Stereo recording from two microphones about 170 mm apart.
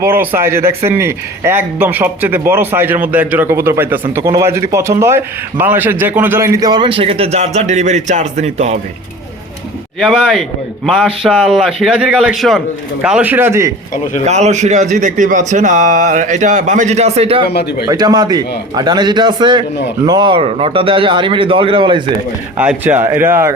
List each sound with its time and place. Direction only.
0.0 s a man's voice: 15° right (ahead or behind); by 8.8 s 40° right (ahead or behind)
10.0 s a man's voice: centre (ahead or behind); by 13.7 s 15° right (ahead or behind)
14.3 s a man's voice: 40° right (ahead or behind)
17.5 s a man's voice: 75° left (ahead or behind)
17.8 s a man's voice: 25° right (ahead or behind)
22.5 s a man's voice: 10° right (ahead or behind)